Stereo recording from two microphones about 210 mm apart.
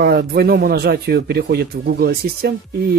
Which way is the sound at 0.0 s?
50° right (ahead or behind).